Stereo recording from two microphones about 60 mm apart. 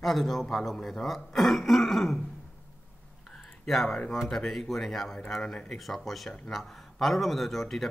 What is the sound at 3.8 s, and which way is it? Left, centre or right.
Speech, centre.